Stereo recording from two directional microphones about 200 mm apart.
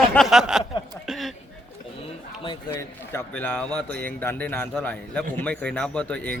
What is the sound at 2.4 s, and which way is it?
Speech, 25° left (ahead or behind).